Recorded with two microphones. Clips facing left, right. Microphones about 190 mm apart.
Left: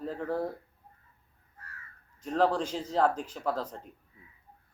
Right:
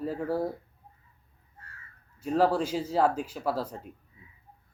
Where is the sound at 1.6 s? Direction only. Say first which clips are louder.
Left 1 dB; 25° right (ahead or behind).